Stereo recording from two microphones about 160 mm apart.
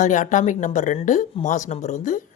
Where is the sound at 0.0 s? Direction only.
50° left (ahead or behind).